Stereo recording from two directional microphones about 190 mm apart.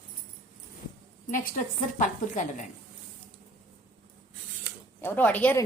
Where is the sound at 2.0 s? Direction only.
40° left (ahead or behind).